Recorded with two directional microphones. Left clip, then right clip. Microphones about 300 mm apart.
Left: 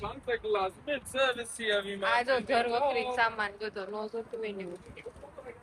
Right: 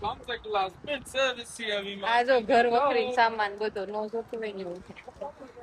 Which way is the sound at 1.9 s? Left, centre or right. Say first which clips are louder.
Right 7 dB; right.